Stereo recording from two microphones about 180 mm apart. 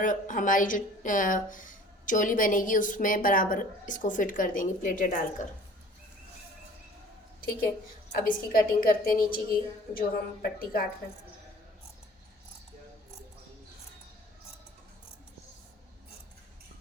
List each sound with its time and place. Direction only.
0.0 s a woman's voice: 45° left (ahead or behind)
8.1 s a woman's voice: 55° left (ahead or behind)